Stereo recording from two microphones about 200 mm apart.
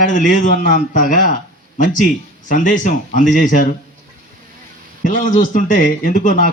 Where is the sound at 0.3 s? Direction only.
40° left (ahead or behind).